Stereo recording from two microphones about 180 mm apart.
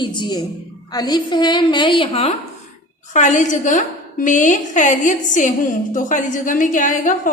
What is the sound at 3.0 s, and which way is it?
A woman's voice, 45° left (ahead or behind).